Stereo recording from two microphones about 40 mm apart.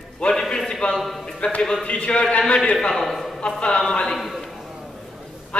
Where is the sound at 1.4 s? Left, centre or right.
Left.